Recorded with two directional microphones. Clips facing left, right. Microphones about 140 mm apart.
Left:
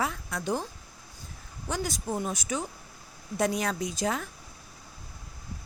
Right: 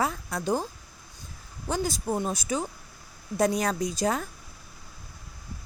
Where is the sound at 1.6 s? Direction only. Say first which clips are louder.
Right 3 dB; 30° right (ahead or behind).